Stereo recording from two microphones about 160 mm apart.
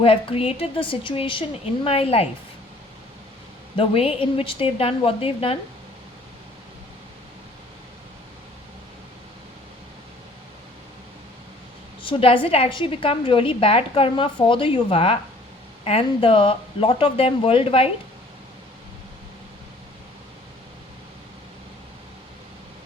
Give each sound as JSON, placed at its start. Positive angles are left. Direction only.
{"t": 0.0, "sound": "a woman's voice", "side_deg": 35}
{"t": 3.8, "sound": "a woman's voice", "side_deg": 35}
{"t": 12.0, "sound": "a woman's voice", "side_deg": 30}